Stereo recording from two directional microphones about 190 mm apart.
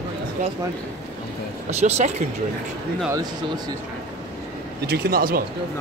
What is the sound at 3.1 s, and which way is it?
Speech, 20° right (ahead or behind).